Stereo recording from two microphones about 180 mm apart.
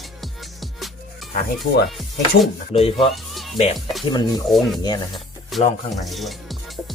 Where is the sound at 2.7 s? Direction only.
30° left (ahead or behind).